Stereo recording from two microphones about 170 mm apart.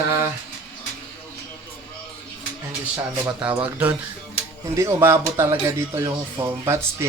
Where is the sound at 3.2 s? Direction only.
10° right (ahead or behind).